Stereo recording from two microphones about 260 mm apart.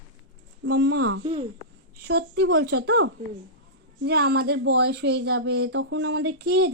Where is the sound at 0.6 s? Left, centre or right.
Right.